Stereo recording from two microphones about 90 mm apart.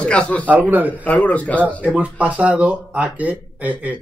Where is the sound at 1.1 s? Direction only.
15° left (ahead or behind).